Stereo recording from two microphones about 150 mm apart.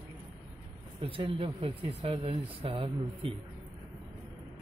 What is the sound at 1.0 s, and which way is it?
Speech, 35° right (ahead or behind).